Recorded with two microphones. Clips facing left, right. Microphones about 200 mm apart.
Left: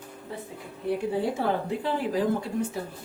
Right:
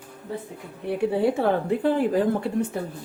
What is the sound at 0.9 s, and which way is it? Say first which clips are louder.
Speech: right 4 dB; 65° right (ahead or behind).